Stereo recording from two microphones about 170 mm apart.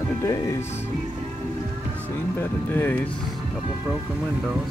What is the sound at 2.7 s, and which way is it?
Speech, 10° left (ahead or behind).